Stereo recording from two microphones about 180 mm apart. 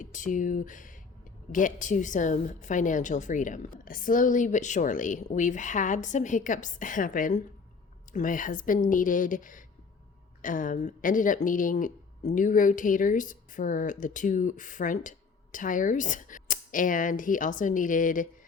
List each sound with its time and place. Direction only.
0.0 s a woman's voice: 45° left (ahead or behind)